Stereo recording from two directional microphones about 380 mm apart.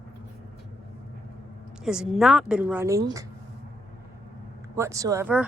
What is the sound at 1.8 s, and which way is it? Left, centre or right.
A woman's voice, centre.